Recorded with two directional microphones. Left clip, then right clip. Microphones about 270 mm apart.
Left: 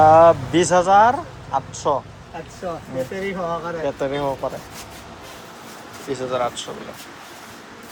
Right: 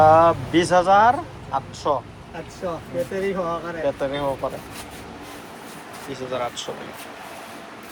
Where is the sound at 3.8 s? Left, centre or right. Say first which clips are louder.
Right 1 dB; centre.